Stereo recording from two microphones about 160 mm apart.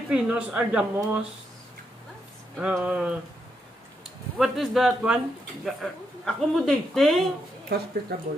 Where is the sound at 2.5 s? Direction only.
10° right (ahead or behind).